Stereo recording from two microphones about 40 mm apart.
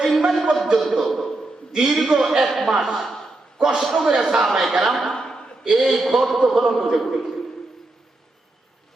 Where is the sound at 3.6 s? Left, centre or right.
Centre.